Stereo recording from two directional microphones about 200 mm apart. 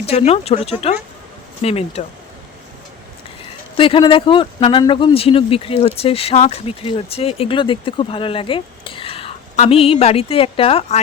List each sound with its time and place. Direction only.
0.0 s speech: 30° left (ahead or behind)
3.8 s speech: 25° left (ahead or behind)